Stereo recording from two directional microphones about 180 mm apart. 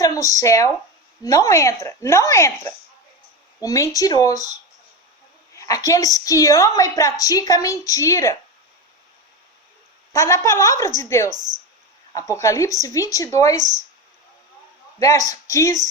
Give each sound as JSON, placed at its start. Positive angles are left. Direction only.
{"t": 0.0, "sound": "a woman's voice", "side_deg": 20}
{"t": 5.5, "sound": "a woman's voice", "side_deg": 20}
{"t": 10.1, "sound": "speech", "side_deg": 15}
{"t": 11.3, "sound": "speech", "side_deg": -45}
{"t": 12.1, "sound": "speech", "side_deg": 15}
{"t": 13.6, "sound": "speech", "side_deg": -40}
{"t": 14.9, "sound": "speech", "side_deg": 20}